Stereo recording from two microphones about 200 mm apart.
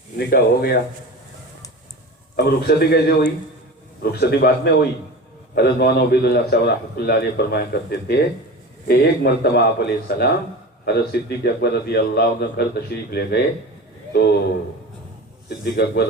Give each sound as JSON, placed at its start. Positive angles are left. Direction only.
{"t": 0.2, "sound": "a man's voice", "side_deg": 55}
{"t": 2.3, "sound": "a man's voice", "side_deg": 50}
{"t": 15.4, "sound": "a man's voice", "side_deg": 50}